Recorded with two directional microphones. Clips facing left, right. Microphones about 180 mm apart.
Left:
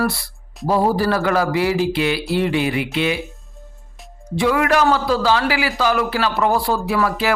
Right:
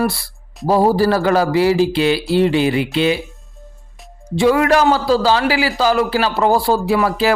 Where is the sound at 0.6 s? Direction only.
35° right (ahead or behind).